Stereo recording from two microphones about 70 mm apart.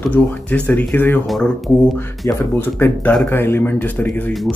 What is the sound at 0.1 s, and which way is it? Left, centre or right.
Speech, left.